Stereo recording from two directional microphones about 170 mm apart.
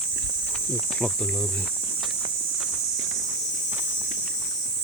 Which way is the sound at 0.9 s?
5° left (ahead or behind).